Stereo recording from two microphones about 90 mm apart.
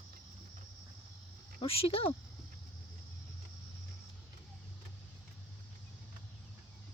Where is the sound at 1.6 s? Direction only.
90° left.